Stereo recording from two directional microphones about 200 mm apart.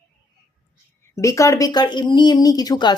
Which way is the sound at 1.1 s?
15° left (ahead or behind).